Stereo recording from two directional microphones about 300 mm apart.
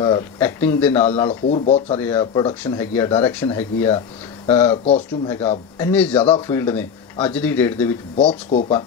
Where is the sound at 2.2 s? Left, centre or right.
Centre.